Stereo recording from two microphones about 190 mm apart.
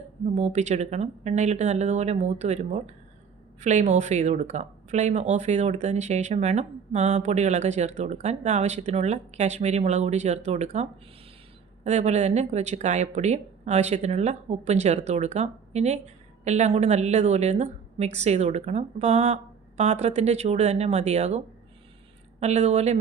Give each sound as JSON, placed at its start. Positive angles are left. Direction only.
{"t": 0.3, "sound": "speech", "side_deg": -35}
{"t": 11.9, "sound": "speech", "side_deg": -40}